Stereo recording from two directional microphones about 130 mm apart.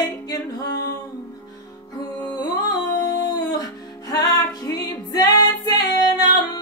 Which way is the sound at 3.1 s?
30° left (ahead or behind).